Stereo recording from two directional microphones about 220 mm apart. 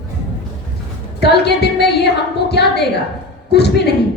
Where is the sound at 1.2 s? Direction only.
50° left (ahead or behind).